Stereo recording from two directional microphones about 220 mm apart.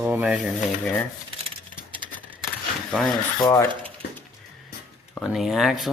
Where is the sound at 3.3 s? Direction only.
20° left (ahead or behind).